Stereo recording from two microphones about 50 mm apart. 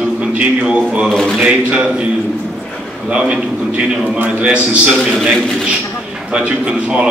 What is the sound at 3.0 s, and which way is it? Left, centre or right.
A man's voice, right.